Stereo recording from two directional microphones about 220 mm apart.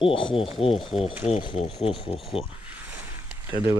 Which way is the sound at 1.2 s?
25° left (ahead or behind).